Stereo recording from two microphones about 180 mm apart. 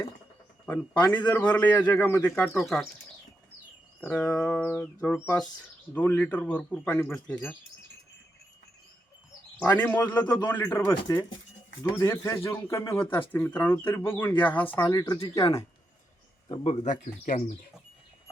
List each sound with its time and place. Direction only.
1.0 s a man's voice: 10° left (ahead or behind)
4.0 s a man's voice: 10° left (ahead or behind)
9.6 s a man's voice: 10° left (ahead or behind)
10.2 s a man's voice: 25° left (ahead or behind)
14.8 s speech: 20° left (ahead or behind)
16.5 s speech: 30° left (ahead or behind)
17.0 s speech: 45° left (ahead or behind)